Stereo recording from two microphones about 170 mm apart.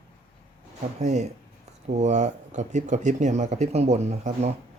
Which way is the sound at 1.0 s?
45° right (ahead or behind).